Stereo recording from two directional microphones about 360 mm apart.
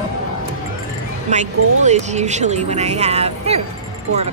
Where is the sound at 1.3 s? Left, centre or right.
Centre.